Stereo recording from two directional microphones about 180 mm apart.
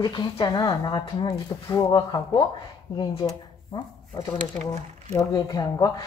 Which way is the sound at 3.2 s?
20° left (ahead or behind).